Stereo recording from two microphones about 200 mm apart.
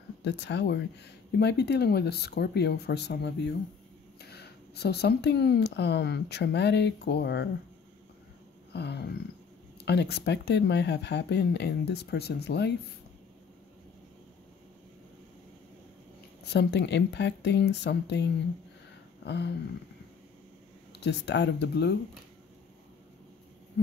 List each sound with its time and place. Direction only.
0.2 s speech: 60° left (ahead or behind)
8.7 s speech: 55° left (ahead or behind)
16.4 s speech: 60° left (ahead or behind)
19.2 s a sound: 60° left (ahead or behind)
21.0 s speech: 60° left (ahead or behind)